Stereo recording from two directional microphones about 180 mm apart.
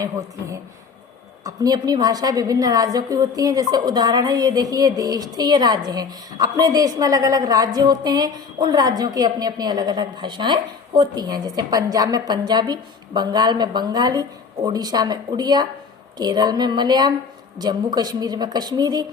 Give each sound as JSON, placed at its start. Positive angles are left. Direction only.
{"t": 0.0, "sound": "a woman's voice", "side_deg": -20}